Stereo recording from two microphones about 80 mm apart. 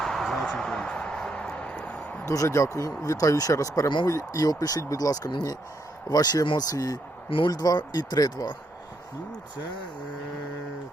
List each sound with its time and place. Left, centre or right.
0.0 s a sound: centre
2.2 s speech: left
7.3 s speech: left